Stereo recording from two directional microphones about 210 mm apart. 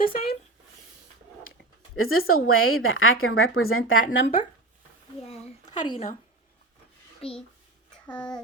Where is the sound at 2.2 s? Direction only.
45° left (ahead or behind).